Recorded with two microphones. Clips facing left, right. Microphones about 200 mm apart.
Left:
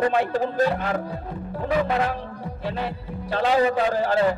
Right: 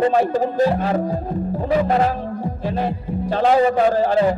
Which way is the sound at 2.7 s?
45° right (ahead or behind).